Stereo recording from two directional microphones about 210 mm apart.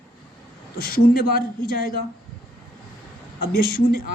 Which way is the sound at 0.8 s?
45° left (ahead or behind).